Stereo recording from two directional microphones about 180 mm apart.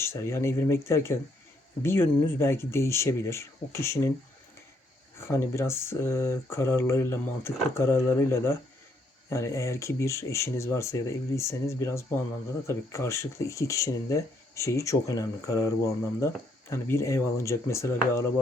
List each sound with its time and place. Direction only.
0.0 s speech: 15° left (ahead or behind)
5.3 s speech: 15° left (ahead or behind)